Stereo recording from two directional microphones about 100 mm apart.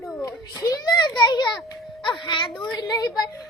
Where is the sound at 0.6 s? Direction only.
40° left (ahead or behind).